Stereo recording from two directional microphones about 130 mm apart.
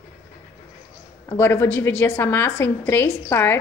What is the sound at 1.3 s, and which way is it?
A woman's voice, 20° left (ahead or behind).